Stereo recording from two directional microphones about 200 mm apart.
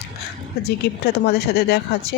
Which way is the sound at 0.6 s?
55° left (ahead or behind).